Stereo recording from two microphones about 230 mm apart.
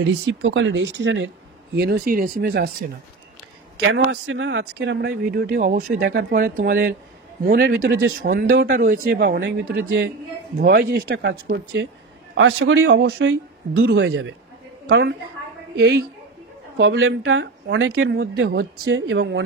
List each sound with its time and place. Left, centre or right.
0.0 s speech: right
1.8 s speech: right
3.7 s speech: right
12.4 s a woman's voice: right